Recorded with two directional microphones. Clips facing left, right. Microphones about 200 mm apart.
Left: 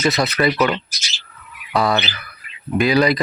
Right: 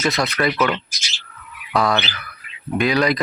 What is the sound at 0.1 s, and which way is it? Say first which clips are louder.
Speech: left 2 dB; centre (ahead or behind).